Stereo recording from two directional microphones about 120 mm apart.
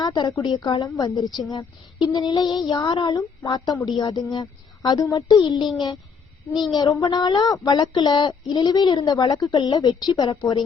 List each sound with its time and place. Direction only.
0.0 s a woman's voice: 35° left (ahead or behind)
6.7 s speech: 30° left (ahead or behind)